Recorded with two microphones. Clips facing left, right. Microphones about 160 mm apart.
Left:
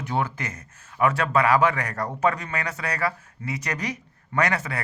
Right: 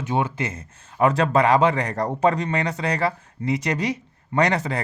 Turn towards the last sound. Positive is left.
turn(degrees=-35)  # may be behind; listen again after turning